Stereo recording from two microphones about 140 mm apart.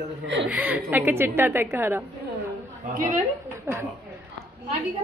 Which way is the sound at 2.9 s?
80° right.